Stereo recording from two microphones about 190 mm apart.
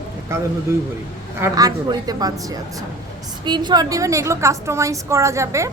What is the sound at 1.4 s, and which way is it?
A woman's voice, 20° right (ahead or behind).